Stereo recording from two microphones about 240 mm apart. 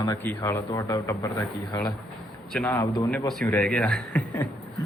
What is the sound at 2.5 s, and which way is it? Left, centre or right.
Speech, centre.